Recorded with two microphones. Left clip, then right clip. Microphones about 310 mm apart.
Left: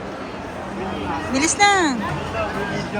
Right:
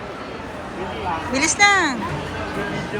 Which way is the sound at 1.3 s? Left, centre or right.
Centre.